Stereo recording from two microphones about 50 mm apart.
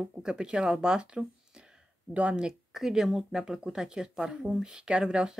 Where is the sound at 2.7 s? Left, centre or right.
Centre.